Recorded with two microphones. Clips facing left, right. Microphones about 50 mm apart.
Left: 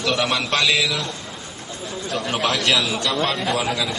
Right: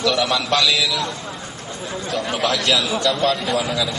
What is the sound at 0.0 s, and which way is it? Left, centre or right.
A man's voice, left.